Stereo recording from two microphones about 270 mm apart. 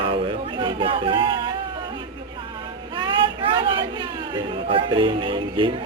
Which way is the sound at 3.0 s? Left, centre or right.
Centre.